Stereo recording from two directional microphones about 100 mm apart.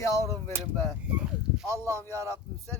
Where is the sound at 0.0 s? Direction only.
30° left (ahead or behind).